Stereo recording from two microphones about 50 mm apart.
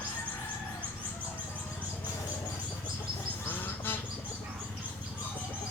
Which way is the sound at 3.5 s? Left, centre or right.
Left.